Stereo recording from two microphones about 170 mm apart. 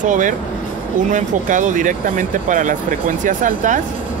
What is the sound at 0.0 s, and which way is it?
Speech, 50° right (ahead or behind).